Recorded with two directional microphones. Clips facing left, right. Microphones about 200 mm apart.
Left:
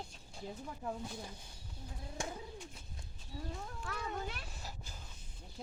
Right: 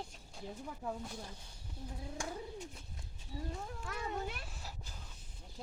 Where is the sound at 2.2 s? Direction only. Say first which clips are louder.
Left 1 dB; 25° left (ahead or behind).